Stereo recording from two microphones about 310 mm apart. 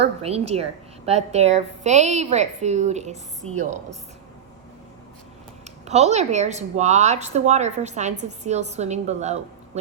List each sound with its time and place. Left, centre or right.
0.2 s a woman's voice: centre
5.8 s a woman's voice: right